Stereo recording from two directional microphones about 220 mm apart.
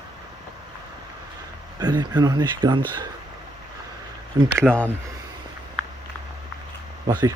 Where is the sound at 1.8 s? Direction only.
20° right (ahead or behind).